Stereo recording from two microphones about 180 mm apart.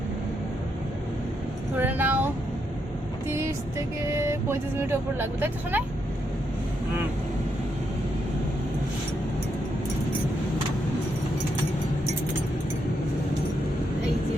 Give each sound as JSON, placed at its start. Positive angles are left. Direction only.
{"t": 1.7, "sound": "a sound", "side_deg": -10}
{"t": 3.2, "sound": "vehicle", "side_deg": -15}
{"t": 4.1, "sound": "speech", "side_deg": -15}